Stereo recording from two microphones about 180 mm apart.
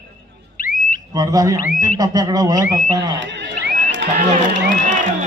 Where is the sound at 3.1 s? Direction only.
80° right.